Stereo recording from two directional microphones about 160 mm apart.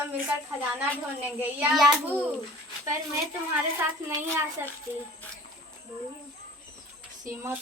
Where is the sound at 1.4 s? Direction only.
10° right (ahead or behind).